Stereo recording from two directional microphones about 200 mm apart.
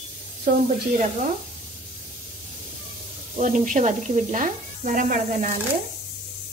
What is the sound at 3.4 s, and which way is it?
Speech, 40° right (ahead or behind).